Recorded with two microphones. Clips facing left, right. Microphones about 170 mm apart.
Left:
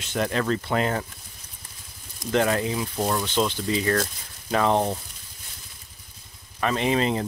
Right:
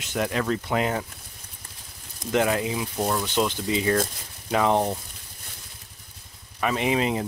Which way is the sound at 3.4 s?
15° right (ahead or behind).